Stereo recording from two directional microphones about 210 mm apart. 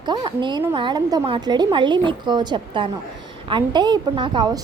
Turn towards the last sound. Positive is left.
turn(degrees=-20)  # may be behind; listen again after turning